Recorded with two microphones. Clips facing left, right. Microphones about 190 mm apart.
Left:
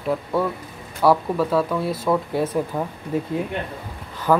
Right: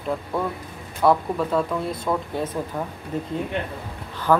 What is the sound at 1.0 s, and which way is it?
Speech, 5° left (ahead or behind).